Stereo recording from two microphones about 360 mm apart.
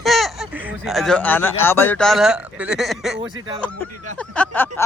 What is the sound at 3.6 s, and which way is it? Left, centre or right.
Speech, centre.